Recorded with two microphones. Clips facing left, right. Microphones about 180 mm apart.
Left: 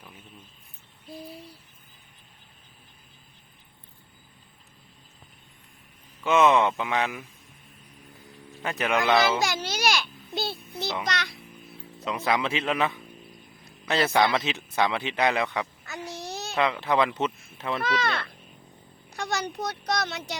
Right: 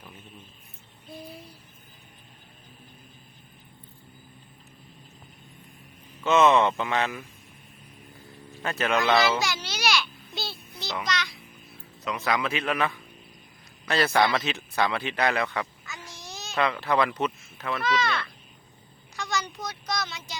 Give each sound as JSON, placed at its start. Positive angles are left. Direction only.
{"t": 6.2, "sound": "speech", "side_deg": 10}
{"t": 8.6, "sound": "speech", "side_deg": 15}
{"t": 9.4, "sound": "babbling", "side_deg": 50}
{"t": 12.0, "sound": "a man's voice", "side_deg": 25}
{"t": 15.9, "sound": "child singing", "side_deg": 60}
{"t": 16.6, "sound": "a man's voice", "side_deg": 20}
{"t": 17.8, "sound": "speech", "side_deg": 55}
{"t": 19.1, "sound": "speech", "side_deg": 60}